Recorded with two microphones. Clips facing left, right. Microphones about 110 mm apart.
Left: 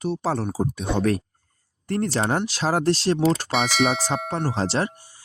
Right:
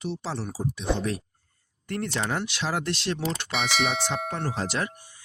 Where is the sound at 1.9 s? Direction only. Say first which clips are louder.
Left 6 dB; 35° left (ahead or behind).